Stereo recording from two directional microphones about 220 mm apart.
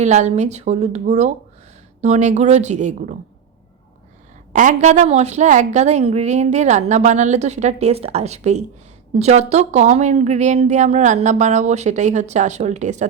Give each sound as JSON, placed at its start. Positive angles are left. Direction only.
{"t": 0.0, "sound": "a woman's voice", "side_deg": -30}
{"t": 4.5, "sound": "a woman's voice", "side_deg": -35}